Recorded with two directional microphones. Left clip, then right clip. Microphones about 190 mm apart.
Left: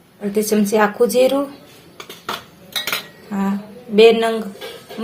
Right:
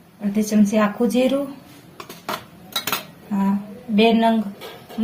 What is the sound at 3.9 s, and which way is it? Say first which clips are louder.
Speech: left 7 dB; 30° left (ahead or behind).